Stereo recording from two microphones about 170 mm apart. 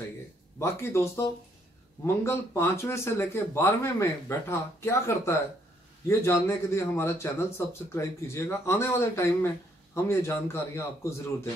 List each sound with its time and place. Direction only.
0.6 s speech: 15° left (ahead or behind)
2.2 s speech: 15° left (ahead or behind)